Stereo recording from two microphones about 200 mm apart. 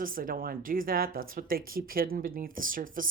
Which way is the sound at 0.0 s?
45° right (ahead or behind).